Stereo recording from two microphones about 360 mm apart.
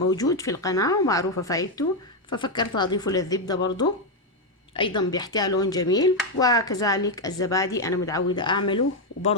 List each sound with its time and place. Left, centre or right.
0.1 s speech: centre